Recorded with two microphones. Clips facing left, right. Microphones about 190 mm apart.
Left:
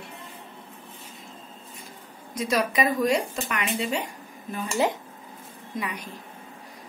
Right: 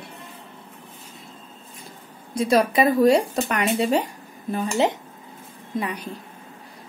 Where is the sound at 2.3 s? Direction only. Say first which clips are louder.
Right 6 dB; 30° right (ahead or behind).